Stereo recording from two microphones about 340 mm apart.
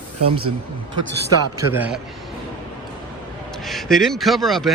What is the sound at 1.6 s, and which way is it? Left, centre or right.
Speech, centre.